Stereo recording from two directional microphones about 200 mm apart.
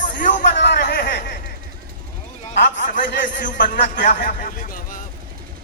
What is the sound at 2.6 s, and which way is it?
A man's voice, 40° left (ahead or behind).